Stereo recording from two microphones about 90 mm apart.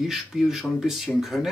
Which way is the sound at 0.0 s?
5° right (ahead or behind).